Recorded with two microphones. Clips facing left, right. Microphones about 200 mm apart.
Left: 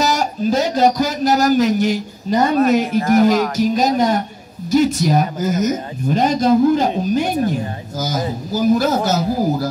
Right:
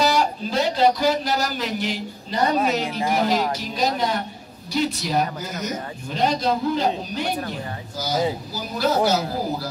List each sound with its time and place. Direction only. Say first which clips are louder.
0.0 s a man's voice: left 3 dB; 45° left (ahead or behind)
8.0 s a man's voice: left 1 dB; 45° left (ahead or behind)